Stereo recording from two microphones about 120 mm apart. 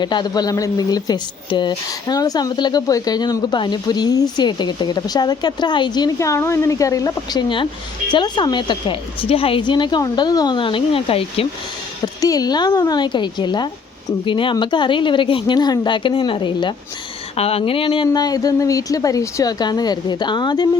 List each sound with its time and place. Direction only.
0.0 s a woman's voice: 40° left (ahead or behind)
6.1 s a woman's voice: 25° left (ahead or behind)
7.4 s a woman's voice: 40° left (ahead or behind)
12.0 s a woman's voice: 30° left (ahead or behind)
17.3 s a woman's voice: 55° left (ahead or behind); by 20.7 s 35° left (ahead or behind)